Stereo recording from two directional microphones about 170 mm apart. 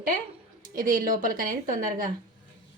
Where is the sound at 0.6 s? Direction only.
55° right (ahead or behind).